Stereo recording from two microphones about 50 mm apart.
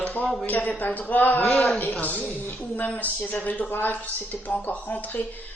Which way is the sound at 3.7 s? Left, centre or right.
Left.